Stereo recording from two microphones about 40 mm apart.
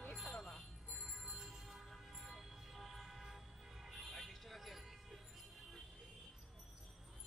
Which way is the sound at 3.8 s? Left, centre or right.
Centre.